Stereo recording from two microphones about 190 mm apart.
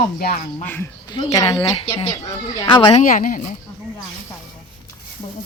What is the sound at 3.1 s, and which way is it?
Speech, 45° left (ahead or behind).